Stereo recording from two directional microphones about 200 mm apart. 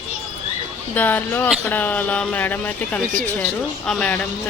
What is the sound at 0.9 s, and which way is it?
Speech, 10° left (ahead or behind).